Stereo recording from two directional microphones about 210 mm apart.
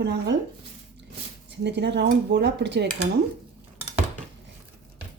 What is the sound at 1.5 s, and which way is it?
Speech, 55° right (ahead or behind).